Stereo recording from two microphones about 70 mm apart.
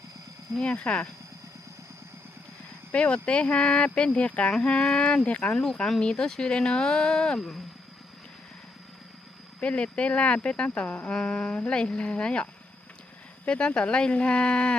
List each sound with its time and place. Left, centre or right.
0.6 s speech: centre
2.9 s speech: centre
9.6 s speech: centre